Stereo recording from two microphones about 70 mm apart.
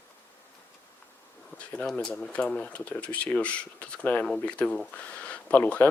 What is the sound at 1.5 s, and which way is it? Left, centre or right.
Speech, centre.